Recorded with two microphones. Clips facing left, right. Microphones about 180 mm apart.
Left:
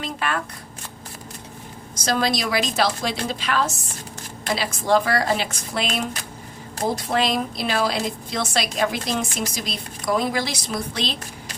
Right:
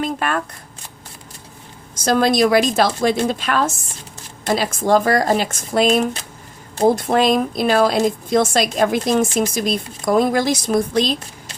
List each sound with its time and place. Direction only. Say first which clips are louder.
0.0 s speech: right 5 dB; 45° right (ahead or behind)
2.0 s a woman's voice: right 8 dB; 50° right (ahead or behind)